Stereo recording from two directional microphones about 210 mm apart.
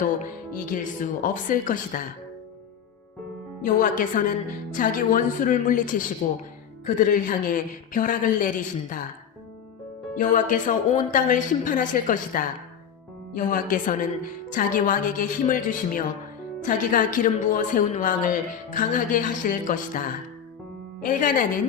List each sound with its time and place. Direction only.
0.6 s speech: 40° left (ahead or behind)
3.6 s speech: 40° left (ahead or behind)
10.2 s speech: 40° left (ahead or behind)